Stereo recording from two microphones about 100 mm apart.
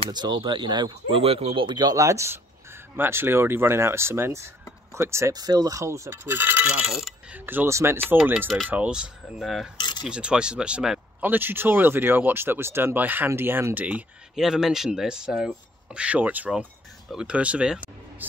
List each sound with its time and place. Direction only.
0.1 s speech: 50° right (ahead or behind)
1.8 s speech: 35° right (ahead or behind)
5.3 s speech: 40° right (ahead or behind); by 6.7 s 20° right (ahead or behind)
6.7 s coin: 5° right (ahead or behind)
7.3 s speech: 20° right (ahead or behind); by 9.7 s centre (ahead or behind)
9.8 s a sound: 50° left (ahead or behind)
10.0 s speech: 10° right (ahead or behind)
11.2 s speech: 20° right (ahead or behind)
14.3 s speech: 5° right (ahead or behind)